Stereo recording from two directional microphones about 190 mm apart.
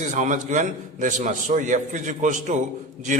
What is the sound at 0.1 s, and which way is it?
A man's voice, 40° right (ahead or behind).